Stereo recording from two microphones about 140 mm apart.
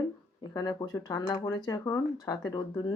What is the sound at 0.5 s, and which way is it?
Speech, 30° left (ahead or behind).